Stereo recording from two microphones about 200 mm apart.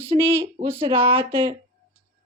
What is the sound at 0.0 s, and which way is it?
Speech, 30° right (ahead or behind).